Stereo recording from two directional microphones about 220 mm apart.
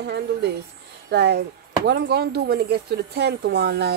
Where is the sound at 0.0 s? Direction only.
50° right (ahead or behind).